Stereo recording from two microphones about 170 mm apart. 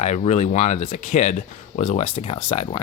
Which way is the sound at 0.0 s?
40° left (ahead or behind).